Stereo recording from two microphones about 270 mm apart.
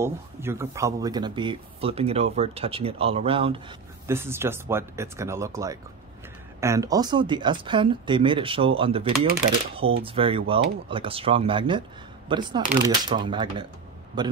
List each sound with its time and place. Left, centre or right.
0.0 s speech: centre
4.1 s speech: centre